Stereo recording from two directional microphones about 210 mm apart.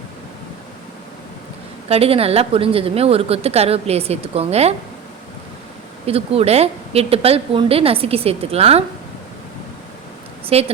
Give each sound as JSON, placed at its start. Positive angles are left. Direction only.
{"t": 1.9, "sound": "a woman's voice", "side_deg": -30}
{"t": 6.1, "sound": "a woman's voice", "side_deg": -30}
{"t": 10.4, "sound": "speech", "side_deg": -30}